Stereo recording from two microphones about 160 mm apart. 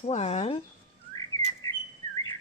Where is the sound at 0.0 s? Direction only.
45° left (ahead or behind).